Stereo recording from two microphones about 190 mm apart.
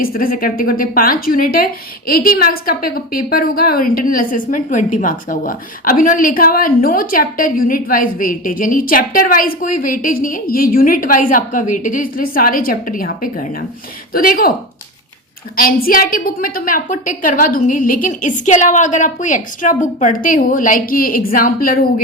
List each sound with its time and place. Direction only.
0.0 s a woman's voice: 50° left (ahead or behind)
15.5 s a woman's voice: 50° left (ahead or behind)